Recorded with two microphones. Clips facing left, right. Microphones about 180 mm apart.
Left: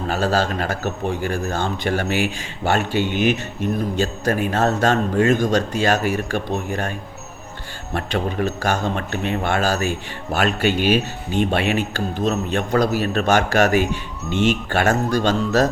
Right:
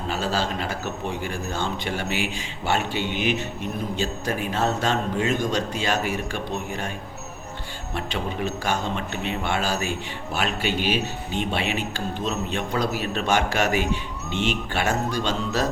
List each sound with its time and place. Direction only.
0.1 s speech: 45° left (ahead or behind)
7.9 s speech: 45° left (ahead or behind)